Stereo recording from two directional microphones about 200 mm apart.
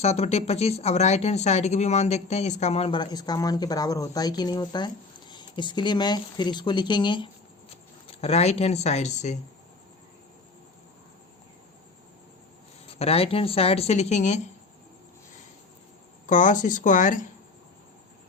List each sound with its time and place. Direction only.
0.0 s speech: 30° left (ahead or behind)
12.9 s speech: 30° left (ahead or behind)
16.2 s speech: 40° left (ahead or behind)